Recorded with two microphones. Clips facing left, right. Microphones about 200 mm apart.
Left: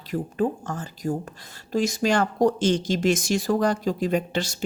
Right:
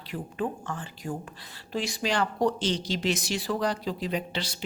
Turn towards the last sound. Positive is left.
turn(degrees=50)  # may be behind; listen again after turning